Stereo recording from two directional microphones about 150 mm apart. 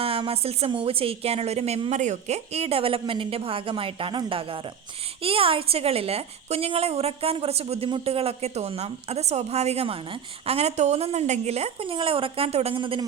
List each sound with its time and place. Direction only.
0.0 s a woman's voice: 40° right (ahead or behind)